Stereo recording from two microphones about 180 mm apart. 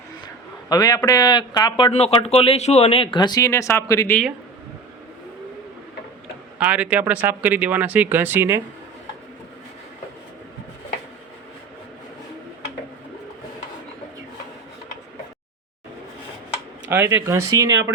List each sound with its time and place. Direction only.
0.7 s speech: 20° left (ahead or behind)
6.6 s speech: 5° right (ahead or behind)
16.9 s speech: 10° right (ahead or behind)